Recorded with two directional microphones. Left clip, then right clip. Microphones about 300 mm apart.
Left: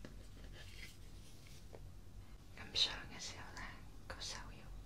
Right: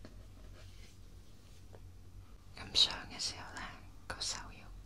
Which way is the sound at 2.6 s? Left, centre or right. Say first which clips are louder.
Right 7 dB; centre.